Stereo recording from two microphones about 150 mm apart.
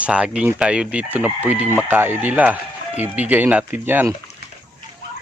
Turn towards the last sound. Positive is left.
turn(degrees=-15)  # may be behind; listen again after turning